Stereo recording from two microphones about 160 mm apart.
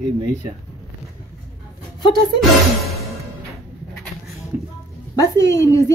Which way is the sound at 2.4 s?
Centre (ahead or behind).